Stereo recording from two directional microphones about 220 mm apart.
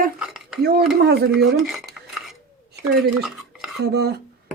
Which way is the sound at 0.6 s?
45° right (ahead or behind).